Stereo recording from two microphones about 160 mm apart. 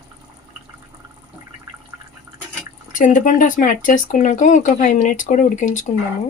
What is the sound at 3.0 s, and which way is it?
Speech, 55° left (ahead or behind).